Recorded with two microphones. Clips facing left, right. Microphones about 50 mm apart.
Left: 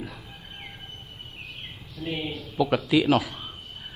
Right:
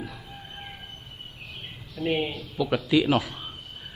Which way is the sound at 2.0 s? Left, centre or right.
Right.